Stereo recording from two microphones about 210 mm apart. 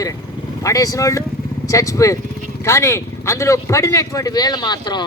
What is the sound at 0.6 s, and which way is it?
Speech, 15° left (ahead or behind).